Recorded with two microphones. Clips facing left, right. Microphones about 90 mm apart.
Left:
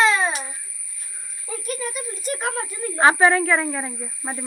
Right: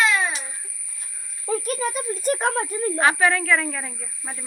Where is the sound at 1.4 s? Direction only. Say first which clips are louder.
Right 5 dB; 45° right (ahead or behind).